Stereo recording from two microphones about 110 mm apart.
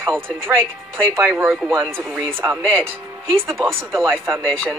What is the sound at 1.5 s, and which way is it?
Speech, centre (ahead or behind).